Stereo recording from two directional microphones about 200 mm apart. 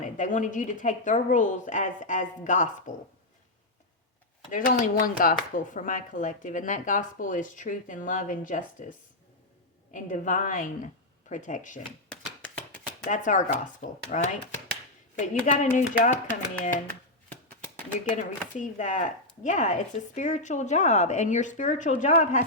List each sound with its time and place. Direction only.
0.0 s speech: 40° left (ahead or behind)
4.5 s speech: 45° left (ahead or behind)
13.1 s speech: 40° left (ahead or behind)
15.4 s speech: 40° left (ahead or behind)
17.9 s speech: 40° left (ahead or behind)